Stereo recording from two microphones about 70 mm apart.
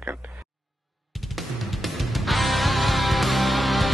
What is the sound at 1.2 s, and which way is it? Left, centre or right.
Music, centre.